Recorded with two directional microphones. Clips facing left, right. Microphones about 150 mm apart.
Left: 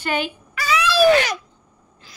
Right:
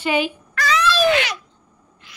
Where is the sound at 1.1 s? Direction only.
40° left (ahead or behind).